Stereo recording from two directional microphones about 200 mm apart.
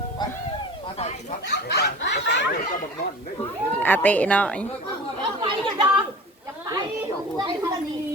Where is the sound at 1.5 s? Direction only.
55° left (ahead or behind).